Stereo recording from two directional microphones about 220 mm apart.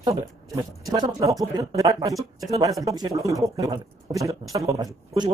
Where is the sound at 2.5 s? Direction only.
15° right (ahead or behind).